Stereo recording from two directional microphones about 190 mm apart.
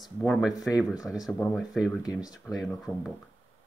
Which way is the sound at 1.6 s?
Centre (ahead or behind).